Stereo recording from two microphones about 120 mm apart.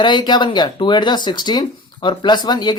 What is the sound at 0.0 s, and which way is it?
Speech, 40° left (ahead or behind).